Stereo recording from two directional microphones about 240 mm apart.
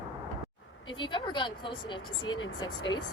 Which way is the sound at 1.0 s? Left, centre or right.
Centre.